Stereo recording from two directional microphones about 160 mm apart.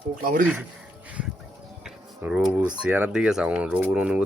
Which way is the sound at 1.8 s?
5° right (ahead or behind).